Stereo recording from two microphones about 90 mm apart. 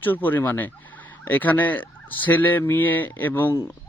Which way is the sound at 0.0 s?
20° left (ahead or behind).